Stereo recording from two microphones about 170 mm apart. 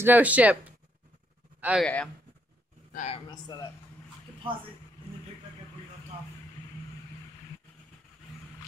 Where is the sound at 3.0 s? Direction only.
35° left (ahead or behind).